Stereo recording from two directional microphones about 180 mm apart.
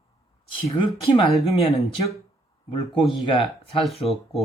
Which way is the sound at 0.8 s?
30° left (ahead or behind).